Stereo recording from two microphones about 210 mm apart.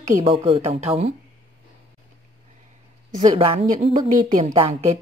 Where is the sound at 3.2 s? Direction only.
30° right (ahead or behind).